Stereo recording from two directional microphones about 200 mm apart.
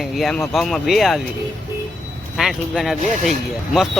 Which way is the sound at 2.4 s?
Centre (ahead or behind).